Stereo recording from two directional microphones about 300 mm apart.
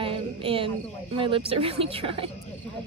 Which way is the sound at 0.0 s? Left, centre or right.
Centre.